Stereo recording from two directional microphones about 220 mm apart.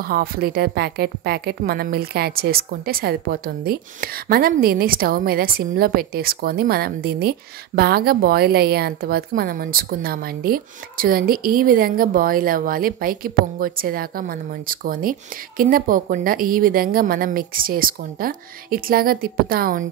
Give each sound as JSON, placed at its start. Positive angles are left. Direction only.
{"t": 0.0, "sound": "a woman's voice", "side_deg": -40}